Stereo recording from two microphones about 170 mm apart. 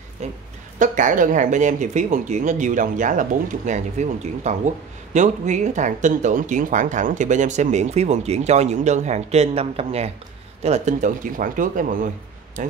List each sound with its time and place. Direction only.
0.2 s speech: 40° right (ahead or behind)